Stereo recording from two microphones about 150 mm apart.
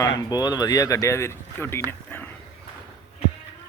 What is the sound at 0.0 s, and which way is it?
Speech, 25° left (ahead or behind).